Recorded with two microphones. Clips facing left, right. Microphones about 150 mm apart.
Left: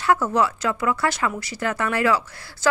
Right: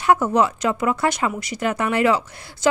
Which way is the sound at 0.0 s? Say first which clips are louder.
Right 3 dB; 20° right (ahead or behind).